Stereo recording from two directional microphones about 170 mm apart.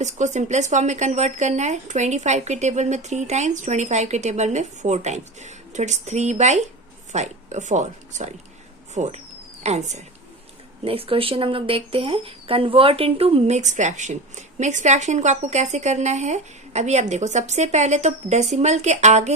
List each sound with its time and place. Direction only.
0.0 s speech: 45° right (ahead or behind)